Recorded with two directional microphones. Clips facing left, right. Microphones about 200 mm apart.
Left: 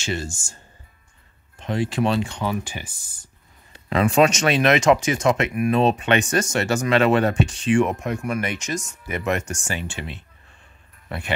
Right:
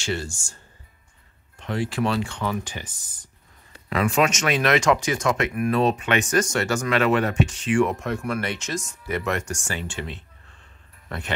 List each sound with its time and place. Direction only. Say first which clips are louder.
1.6 s speech: left 2 dB; 20° left (ahead or behind)
3.9 s speech: left 4 dB; 30° left (ahead or behind); by 11.3 s 10° left (ahead or behind)